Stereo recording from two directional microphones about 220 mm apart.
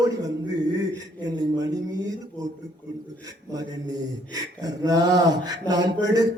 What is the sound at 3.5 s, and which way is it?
A man's voice, 15° right (ahead or behind).